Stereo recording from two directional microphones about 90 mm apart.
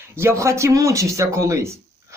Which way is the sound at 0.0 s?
30° right (ahead or behind).